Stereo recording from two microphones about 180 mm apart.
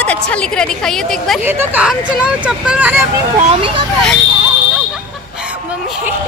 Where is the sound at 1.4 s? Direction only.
10° right (ahead or behind).